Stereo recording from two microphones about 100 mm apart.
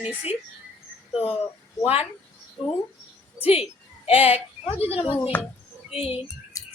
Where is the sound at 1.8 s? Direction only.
75° left (ahead or behind).